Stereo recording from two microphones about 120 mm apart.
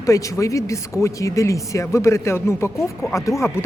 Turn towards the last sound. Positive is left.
turn(degrees=25)  # may be behind; listen again after turning